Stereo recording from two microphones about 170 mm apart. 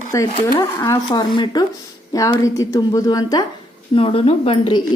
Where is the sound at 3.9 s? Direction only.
35° left (ahead or behind).